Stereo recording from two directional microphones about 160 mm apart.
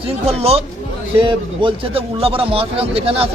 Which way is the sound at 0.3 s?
40° right (ahead or behind).